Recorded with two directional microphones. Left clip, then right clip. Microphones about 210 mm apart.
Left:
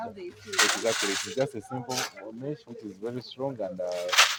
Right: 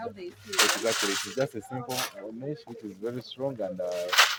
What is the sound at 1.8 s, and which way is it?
Speech, 30° right (ahead or behind).